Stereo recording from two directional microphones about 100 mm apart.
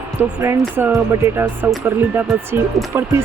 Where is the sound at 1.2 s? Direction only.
25° right (ahead or behind).